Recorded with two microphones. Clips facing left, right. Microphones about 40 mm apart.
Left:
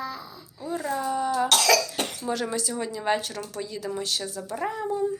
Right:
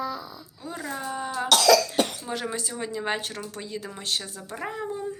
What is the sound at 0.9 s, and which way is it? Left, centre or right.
A woman's voice, right.